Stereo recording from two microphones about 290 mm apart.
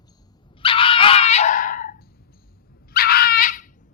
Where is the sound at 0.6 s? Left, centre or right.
Centre.